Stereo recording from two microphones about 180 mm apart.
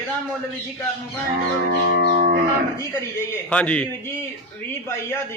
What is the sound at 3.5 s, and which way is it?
Speech, 5° left (ahead or behind).